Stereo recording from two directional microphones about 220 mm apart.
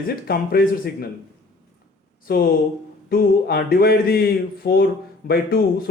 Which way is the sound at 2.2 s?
45° left (ahead or behind).